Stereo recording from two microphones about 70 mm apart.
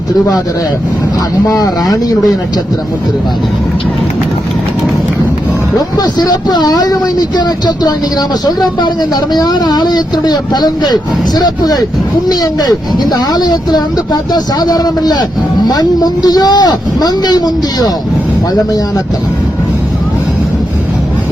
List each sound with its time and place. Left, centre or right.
1.5 s speech: left
6.0 s speech: left
9.3 s speech: left